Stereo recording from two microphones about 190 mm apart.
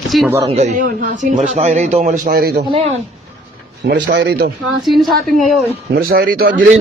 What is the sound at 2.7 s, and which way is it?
Speech, 35° right (ahead or behind).